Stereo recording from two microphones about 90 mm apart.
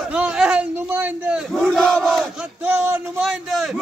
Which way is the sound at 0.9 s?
20° right (ahead or behind).